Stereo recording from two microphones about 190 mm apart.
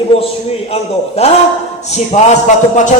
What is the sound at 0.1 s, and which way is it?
A man's voice, 30° left (ahead or behind).